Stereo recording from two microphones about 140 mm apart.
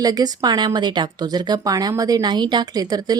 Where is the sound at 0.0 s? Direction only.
30° right (ahead or behind).